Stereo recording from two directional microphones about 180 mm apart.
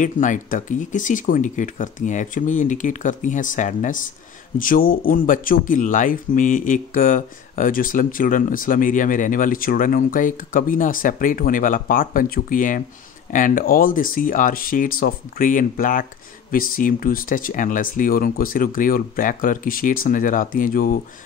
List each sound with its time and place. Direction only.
0.0 s speech: 45° left (ahead or behind)